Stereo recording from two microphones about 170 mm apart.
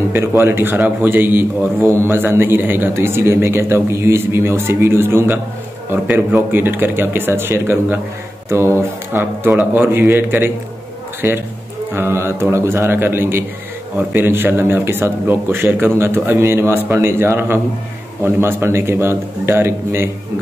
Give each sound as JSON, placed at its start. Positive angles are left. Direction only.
{"t": 0.1, "sound": "a man's voice", "side_deg": -15}